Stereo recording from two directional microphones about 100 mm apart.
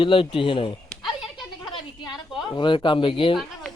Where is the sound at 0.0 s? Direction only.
60° left (ahead or behind).